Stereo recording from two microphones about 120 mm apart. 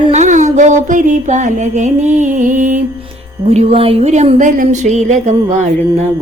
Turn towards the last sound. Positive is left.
turn(degrees=-70)  # may be behind; listen again after turning